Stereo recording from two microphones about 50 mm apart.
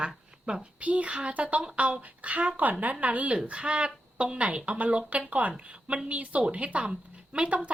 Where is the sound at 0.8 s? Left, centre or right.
Right.